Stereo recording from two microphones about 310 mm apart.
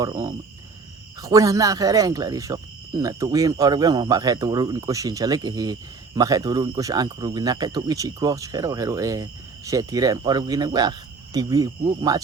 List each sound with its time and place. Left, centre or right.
0.0 s speech: centre